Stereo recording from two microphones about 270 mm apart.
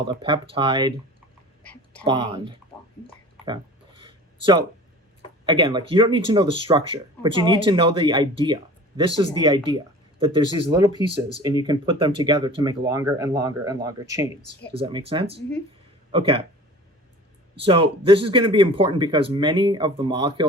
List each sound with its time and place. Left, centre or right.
0.1 s speech: centre
1.6 s speech: centre
2.0 s speech: centre
3.4 s a sound: centre
5.5 s speech: centre
17.7 s speech: centre